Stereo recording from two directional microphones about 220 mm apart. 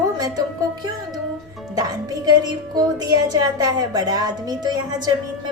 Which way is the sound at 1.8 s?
15° right (ahead or behind).